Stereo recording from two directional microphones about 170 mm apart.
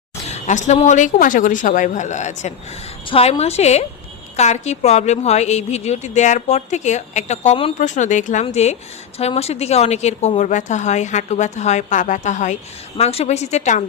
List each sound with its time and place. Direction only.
0.3 s a woman's voice: 45° left (ahead or behind)